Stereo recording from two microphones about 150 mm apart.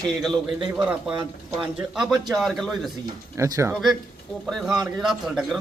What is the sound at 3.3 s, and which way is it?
Speech, 20° right (ahead or behind).